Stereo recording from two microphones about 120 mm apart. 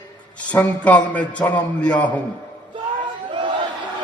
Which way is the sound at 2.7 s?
40° right (ahead or behind).